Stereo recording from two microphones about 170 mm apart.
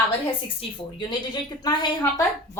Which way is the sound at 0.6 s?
30° left (ahead or behind).